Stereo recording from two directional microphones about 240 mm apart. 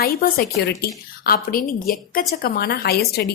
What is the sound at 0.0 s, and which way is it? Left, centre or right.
A woman's voice, left.